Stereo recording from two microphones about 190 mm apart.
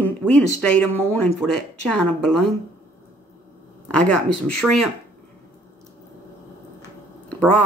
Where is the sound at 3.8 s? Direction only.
5° left (ahead or behind).